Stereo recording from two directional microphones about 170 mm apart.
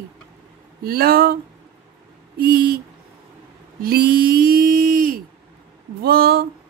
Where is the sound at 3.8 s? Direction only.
65° right (ahead or behind).